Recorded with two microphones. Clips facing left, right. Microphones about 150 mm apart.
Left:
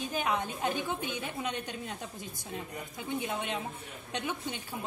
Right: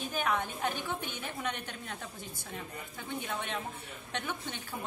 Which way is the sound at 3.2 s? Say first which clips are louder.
Even; 15° left (ahead or behind).